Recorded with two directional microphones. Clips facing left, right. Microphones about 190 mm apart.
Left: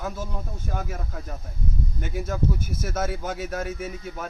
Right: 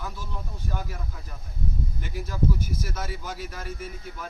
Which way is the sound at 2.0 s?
55° left (ahead or behind).